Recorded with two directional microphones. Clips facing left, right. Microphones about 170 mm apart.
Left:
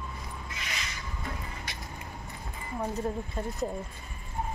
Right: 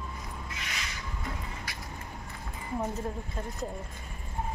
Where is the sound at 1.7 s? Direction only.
25° left (ahead or behind).